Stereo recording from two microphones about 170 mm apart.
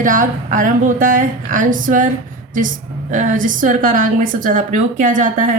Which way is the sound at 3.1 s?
50° right (ahead or behind).